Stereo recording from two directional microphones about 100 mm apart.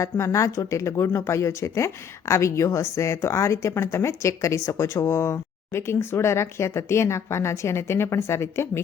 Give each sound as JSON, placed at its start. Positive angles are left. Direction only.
{"t": 0.0, "sound": "speech", "side_deg": 30}